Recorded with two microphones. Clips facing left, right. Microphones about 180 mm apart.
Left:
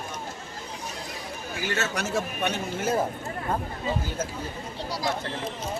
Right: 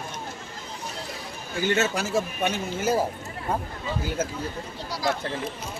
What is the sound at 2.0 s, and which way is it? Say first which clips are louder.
Speech: right 2 dB; 5° right (ahead or behind).